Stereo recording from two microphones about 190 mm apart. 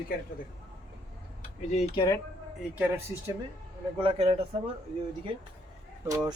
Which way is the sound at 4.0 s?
30° right (ahead or behind).